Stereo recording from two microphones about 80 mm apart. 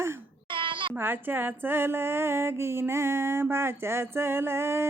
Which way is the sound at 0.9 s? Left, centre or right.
Right.